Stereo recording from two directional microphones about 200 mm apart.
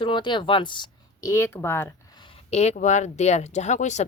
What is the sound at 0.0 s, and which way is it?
Speech, 25° left (ahead or behind).